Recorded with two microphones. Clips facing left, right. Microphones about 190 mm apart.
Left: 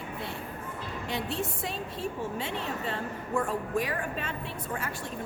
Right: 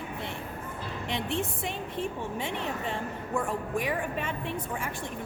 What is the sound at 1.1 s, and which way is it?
A woman's voice, 20° right (ahead or behind).